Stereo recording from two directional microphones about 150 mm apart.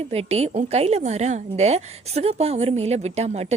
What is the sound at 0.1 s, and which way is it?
A woman's voice, 45° right (ahead or behind).